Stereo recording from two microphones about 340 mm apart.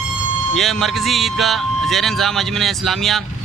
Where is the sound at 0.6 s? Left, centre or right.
Centre.